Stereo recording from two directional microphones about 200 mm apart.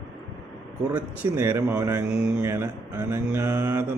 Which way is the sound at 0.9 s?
10° right (ahead or behind).